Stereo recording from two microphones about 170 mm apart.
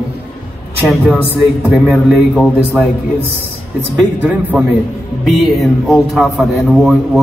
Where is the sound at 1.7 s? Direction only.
Centre (ahead or behind).